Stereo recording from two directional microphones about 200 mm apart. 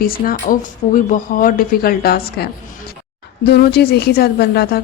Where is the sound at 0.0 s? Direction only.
45° left (ahead or behind).